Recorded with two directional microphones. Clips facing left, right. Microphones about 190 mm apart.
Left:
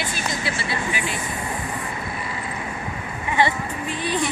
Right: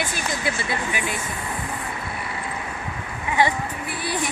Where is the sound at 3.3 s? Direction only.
10° right (ahead or behind).